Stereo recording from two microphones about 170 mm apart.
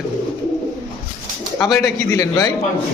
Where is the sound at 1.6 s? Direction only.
5° left (ahead or behind).